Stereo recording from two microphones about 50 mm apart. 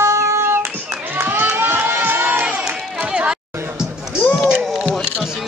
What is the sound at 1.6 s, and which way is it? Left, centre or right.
Crowd, right.